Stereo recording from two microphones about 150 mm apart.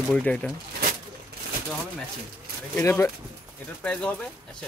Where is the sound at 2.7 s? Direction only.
15° left (ahead or behind).